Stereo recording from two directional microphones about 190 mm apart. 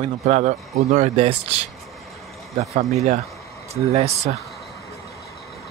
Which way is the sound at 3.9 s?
35° right (ahead or behind).